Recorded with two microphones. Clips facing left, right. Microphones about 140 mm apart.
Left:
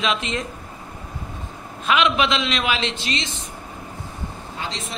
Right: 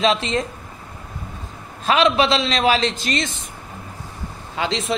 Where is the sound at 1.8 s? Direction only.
35° right (ahead or behind).